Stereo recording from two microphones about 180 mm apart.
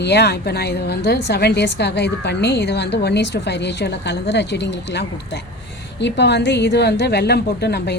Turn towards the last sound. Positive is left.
turn(degrees=65)  # may be behind; listen again after turning